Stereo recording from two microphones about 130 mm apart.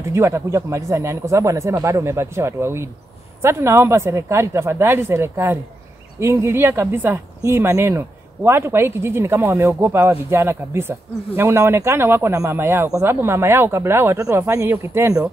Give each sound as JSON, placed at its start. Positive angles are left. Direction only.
{"t": 0.1, "sound": "speech", "side_deg": -20}